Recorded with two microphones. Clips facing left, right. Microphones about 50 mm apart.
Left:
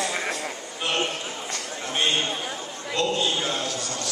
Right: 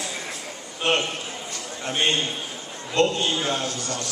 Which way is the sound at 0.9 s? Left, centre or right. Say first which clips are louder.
Right 4 dB; right.